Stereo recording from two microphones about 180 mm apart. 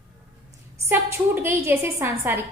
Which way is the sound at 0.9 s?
10° right (ahead or behind).